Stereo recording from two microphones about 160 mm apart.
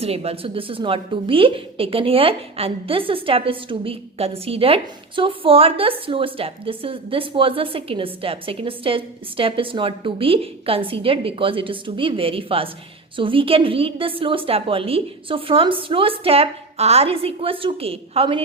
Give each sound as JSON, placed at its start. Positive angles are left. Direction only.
{"t": 0.0, "sound": "a woman's voice", "side_deg": -40}